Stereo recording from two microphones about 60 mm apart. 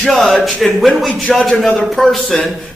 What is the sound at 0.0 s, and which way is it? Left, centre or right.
A man's voice, centre.